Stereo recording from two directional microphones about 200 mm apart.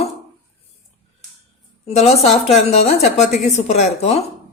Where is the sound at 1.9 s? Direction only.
30° left (ahead or behind).